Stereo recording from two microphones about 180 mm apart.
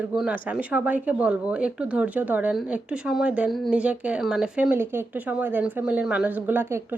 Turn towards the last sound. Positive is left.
turn(degrees=-10)  # may be behind; listen again after turning